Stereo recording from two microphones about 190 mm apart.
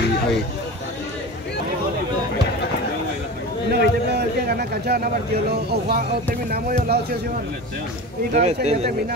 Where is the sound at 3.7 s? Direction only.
60° right (ahead or behind).